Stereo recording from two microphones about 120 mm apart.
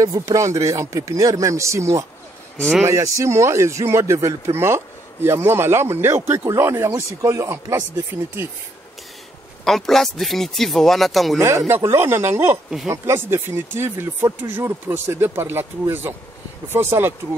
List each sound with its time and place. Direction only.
0.2 s speech: 25° right (ahead or behind)
9.7 s speech: centre (ahead or behind)
11.3 s speech: 25° right (ahead or behind)